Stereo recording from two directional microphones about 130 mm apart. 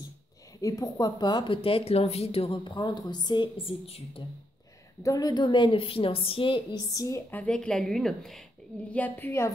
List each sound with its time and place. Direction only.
0.6 s speech: 25° left (ahead or behind)
3.8 s speech: 50° left (ahead or behind)
5.0 s speech: 30° left (ahead or behind)
6.9 s a woman's voice: 25° left (ahead or behind); by 8.5 s centre (ahead or behind)
8.9 s a woman's voice: 15° left (ahead or behind)